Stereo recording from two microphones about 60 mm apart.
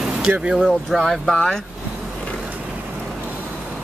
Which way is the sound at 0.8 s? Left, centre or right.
Centre.